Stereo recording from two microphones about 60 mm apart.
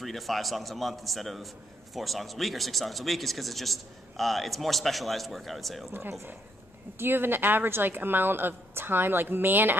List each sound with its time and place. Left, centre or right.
0.0 s a man's voice: centre
5.9 s a woman's voice: right